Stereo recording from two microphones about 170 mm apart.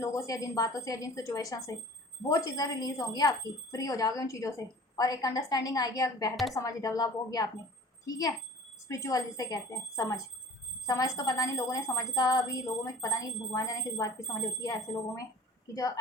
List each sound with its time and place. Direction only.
0.0 s a woman's voice: 20° left (ahead or behind)
8.9 s a woman's voice: 20° left (ahead or behind)